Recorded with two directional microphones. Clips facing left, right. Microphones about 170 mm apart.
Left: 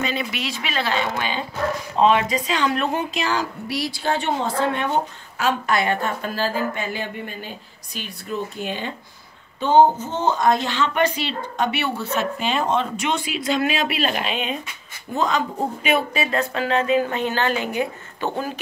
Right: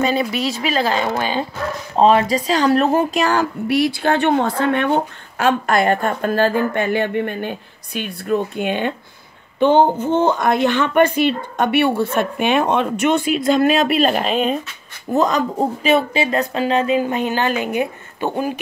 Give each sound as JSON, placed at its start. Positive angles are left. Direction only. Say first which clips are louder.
{"t": 0.0, "sound": "a woman's voice", "louder": "right 7 dB", "side_deg": -40}